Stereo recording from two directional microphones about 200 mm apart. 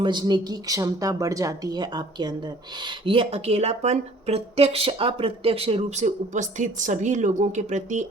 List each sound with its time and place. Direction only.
0.0 s speech: 20° right (ahead or behind); by 8.0 s 35° right (ahead or behind)